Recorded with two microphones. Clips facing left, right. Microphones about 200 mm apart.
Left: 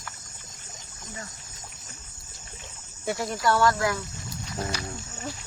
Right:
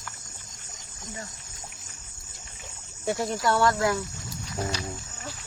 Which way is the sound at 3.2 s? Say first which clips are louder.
Left 1 dB; 20° right (ahead or behind).